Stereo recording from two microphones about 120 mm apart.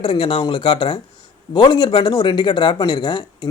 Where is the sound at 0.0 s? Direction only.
45° left (ahead or behind).